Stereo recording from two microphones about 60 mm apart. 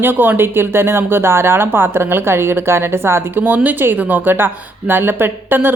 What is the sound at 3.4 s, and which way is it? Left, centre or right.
A woman's voice, right.